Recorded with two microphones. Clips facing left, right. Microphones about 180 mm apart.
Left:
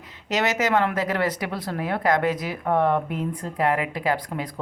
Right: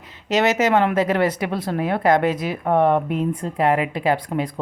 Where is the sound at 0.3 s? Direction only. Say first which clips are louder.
Right 5 dB; 25° right (ahead or behind).